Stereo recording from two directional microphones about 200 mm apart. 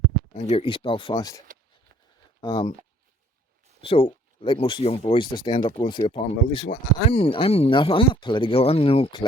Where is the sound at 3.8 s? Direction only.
25° left (ahead or behind).